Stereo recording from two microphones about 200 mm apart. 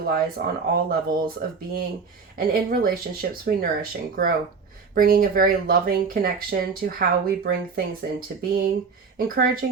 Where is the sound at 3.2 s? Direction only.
45° right (ahead or behind).